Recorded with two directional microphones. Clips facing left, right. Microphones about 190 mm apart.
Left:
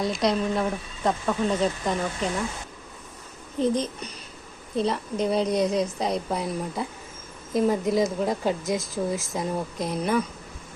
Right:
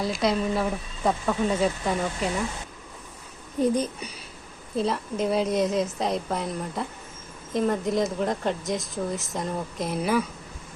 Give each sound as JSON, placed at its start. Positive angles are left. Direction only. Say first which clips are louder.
{"t": 0.0, "sound": "speech", "louder": "left 1 dB", "side_deg": 0}
{"t": 3.6, "sound": "speech", "louder": "right 1 dB", "side_deg": -10}